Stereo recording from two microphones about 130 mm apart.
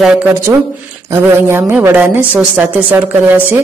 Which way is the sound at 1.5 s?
15° right (ahead or behind).